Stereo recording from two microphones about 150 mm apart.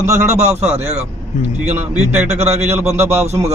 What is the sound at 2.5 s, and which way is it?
Speech, 45° right (ahead or behind).